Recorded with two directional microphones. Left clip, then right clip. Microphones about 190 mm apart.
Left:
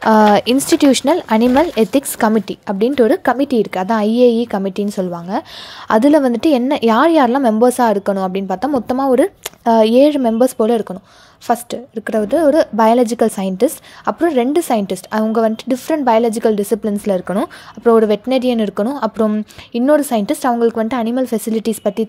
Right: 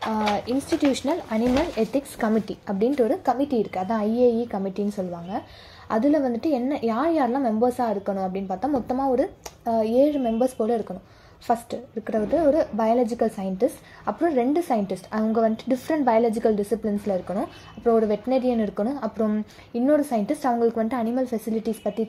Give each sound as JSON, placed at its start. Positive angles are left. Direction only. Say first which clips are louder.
{"t": 0.0, "sound": "a woman's voice", "louder": "left 14 dB", "side_deg": 45}
{"t": 2.9, "sound": "a woman's voice", "louder": "left 10 dB", "side_deg": 35}
{"t": 9.1, "sound": "speech", "louder": "left 10 dB", "side_deg": 55}
{"t": 9.7, "sound": "a woman's voice", "louder": "left 10 dB", "side_deg": 40}
{"t": 11.4, "sound": "a woman's voice", "louder": "left 7 dB", "side_deg": 30}